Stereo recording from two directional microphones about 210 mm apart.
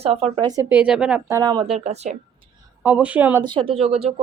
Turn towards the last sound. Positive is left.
turn(degrees=-30)  # may be behind; listen again after turning